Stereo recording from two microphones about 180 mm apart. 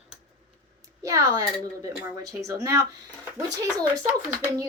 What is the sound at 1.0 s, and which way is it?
A woman's voice, 15° right (ahead or behind).